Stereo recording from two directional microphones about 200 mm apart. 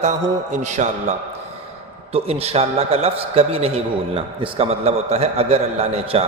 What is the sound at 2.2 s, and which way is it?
A man's voice, 30° right (ahead or behind).